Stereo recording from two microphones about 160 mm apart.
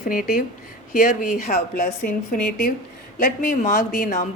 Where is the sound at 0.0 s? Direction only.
60° left (ahead or behind).